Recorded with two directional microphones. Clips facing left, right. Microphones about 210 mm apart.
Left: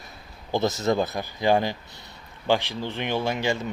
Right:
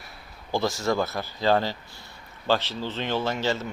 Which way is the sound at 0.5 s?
20° left (ahead or behind).